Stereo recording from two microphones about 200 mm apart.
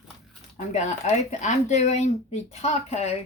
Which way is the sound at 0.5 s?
35° left (ahead or behind).